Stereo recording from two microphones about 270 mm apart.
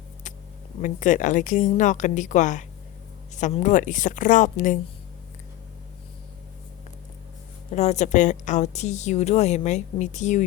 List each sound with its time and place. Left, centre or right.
0.8 s a woman's voice: left
7.7 s a woman's voice: left